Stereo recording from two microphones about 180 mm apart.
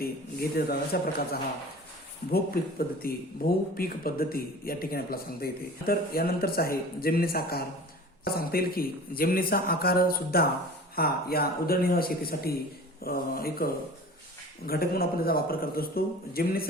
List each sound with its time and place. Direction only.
0.0 s speech: 55° left (ahead or behind)
14.7 s speech: 55° left (ahead or behind)